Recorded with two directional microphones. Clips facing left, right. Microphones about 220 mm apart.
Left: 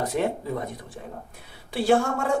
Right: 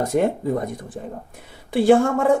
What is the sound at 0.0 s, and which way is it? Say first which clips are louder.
Speech: right 6 dB; 45° right (ahead or behind).